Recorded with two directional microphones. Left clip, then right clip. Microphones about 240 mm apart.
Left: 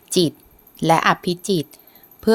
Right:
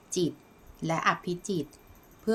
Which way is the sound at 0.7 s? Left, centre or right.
Left.